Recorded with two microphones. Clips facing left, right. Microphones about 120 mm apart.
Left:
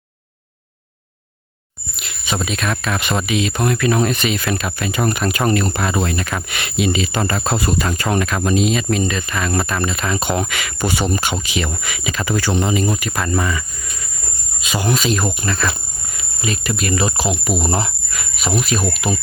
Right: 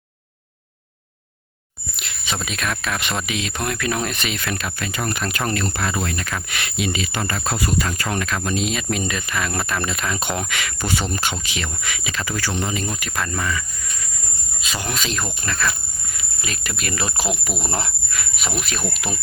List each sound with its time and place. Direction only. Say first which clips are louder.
2.0 s speech: left 5 dB; 5° left (ahead or behind)
8.4 s speech: left 9 dB; 5° left (ahead or behind)
12.3 s speech: left 7 dB; 20° left (ahead or behind)
12.7 s speech: left 7 dB; 10° left (ahead or behind)
14.6 s cricket: left 6 dB; 15° left (ahead or behind)
14.8 s speech: left 9 dB; 5° left (ahead or behind)